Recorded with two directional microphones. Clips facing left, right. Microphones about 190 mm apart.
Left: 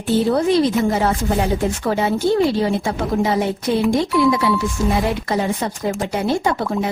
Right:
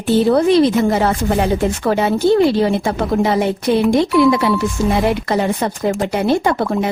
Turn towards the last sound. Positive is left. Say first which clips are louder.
# right 3 dB
turn(degrees=-65)  # may be behind; listen again after turning